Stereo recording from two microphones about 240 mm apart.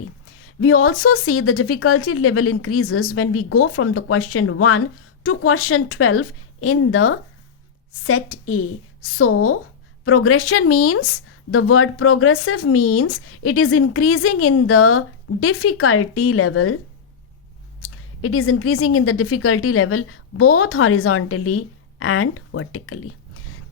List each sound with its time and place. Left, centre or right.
0.3 s a woman's voice: left
17.8 s a woman's voice: left